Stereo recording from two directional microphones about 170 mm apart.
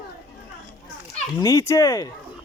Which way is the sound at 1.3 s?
20° left (ahead or behind).